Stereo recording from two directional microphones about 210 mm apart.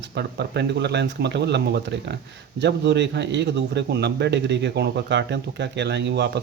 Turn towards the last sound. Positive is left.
turn(degrees=-55)  # may be behind; listen again after turning